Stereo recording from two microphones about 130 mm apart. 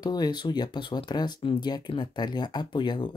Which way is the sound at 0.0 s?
30° left (ahead or behind).